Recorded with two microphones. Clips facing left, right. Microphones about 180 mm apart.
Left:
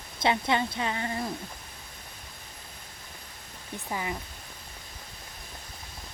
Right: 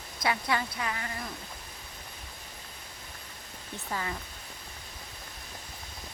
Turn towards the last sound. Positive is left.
turn(degrees=15)  # may be behind; listen again after turning